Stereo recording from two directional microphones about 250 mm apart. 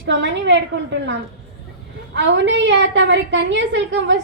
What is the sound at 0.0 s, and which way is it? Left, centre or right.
Speech, right.